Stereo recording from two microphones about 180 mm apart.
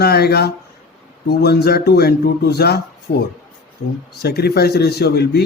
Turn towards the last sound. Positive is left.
turn(degrees=65)  # may be behind; listen again after turning